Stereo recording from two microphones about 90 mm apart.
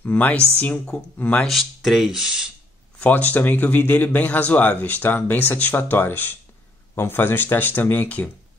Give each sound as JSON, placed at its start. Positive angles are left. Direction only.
{"t": 0.0, "sound": "a woman's voice", "side_deg": 20}
{"t": 1.5, "sound": "speech", "side_deg": 0}
{"t": 3.0, "sound": "speech", "side_deg": 15}